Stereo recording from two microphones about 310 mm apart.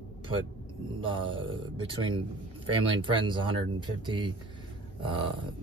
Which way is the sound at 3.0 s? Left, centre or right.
Centre.